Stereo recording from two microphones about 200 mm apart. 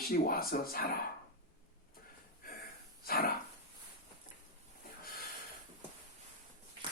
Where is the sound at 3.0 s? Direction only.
50° left (ahead or behind).